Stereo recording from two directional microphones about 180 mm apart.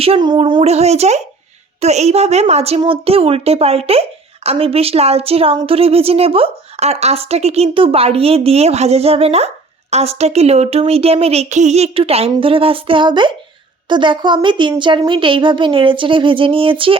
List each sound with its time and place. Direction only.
0.0 s a woman's voice: 30° right (ahead or behind)